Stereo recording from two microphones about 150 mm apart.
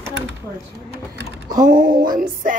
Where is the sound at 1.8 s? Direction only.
65° right (ahead or behind).